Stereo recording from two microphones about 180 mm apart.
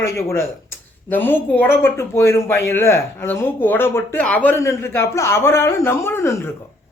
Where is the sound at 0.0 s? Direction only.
15° left (ahead or behind).